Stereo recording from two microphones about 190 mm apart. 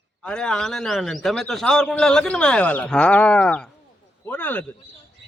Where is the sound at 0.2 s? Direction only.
5° left (ahead or behind).